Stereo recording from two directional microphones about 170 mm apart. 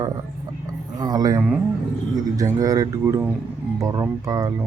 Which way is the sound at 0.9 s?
25° right (ahead or behind).